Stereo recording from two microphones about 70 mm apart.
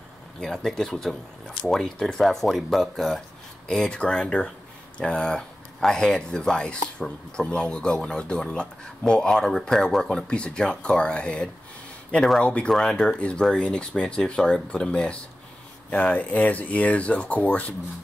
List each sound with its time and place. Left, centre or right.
0.4 s speech: centre; by 17.7 s left